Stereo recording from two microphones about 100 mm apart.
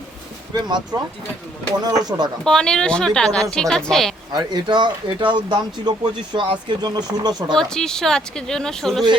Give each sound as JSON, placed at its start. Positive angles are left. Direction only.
{"t": 0.9, "sound": "speech", "side_deg": -40}
{"t": 2.4, "sound": "speech", "side_deg": 5}
{"t": 4.3, "sound": "speech", "side_deg": -45}
{"t": 7.5, "sound": "speech", "side_deg": 5}